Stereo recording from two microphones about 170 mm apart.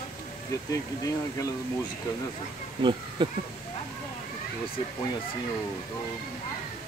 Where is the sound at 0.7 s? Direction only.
20° left (ahead or behind).